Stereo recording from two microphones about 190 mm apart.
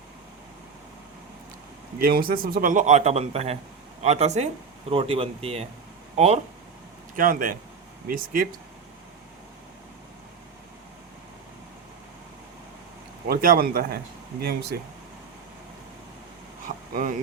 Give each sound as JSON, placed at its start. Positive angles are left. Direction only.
{"t": 2.0, "sound": "a man's voice", "side_deg": -50}
{"t": 7.2, "sound": "a man's voice", "side_deg": -45}
{"t": 13.2, "sound": "a man's voice", "side_deg": -50}
{"t": 16.6, "sound": "vehicle", "side_deg": -45}